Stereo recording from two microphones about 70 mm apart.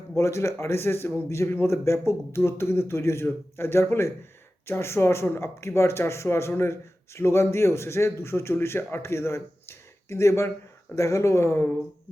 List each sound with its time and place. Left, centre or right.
0.2 s a man's voice: left